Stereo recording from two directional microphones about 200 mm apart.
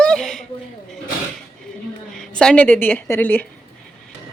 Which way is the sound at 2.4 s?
5° left (ahead or behind).